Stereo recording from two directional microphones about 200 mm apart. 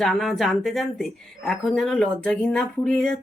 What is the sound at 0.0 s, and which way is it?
Speech, centre (ahead or behind).